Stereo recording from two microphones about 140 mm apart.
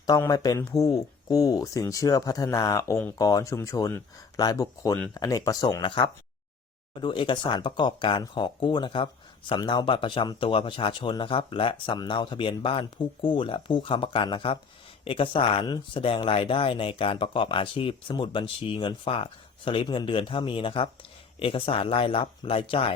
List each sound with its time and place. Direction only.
0.2 s speech: 25° left (ahead or behind)